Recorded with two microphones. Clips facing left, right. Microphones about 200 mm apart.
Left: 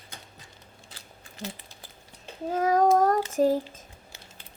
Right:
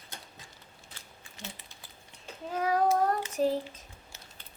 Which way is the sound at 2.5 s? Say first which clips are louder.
Left 5 dB; 45° left (ahead or behind).